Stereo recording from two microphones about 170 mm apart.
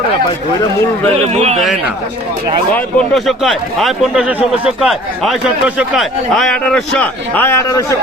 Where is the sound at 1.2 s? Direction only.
40° right (ahead or behind).